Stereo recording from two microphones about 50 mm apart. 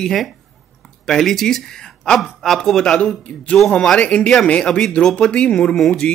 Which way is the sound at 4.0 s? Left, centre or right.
Left.